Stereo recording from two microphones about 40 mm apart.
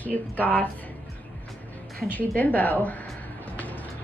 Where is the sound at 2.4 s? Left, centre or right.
Left.